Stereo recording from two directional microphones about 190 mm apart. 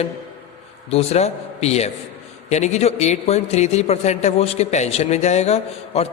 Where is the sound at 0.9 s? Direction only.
35° left (ahead or behind).